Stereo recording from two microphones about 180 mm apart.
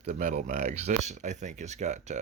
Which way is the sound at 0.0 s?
45° right (ahead or behind).